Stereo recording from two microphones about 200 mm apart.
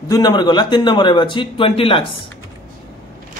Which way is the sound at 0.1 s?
20° left (ahead or behind).